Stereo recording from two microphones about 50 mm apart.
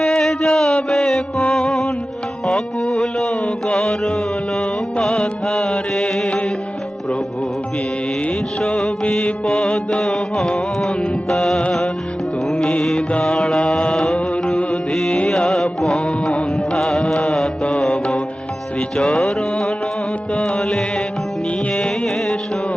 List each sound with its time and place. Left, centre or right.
0.0 s music: centre
8.6 s music: centre
17.9 s music: left
18.9 s music: centre
21.8 s music: centre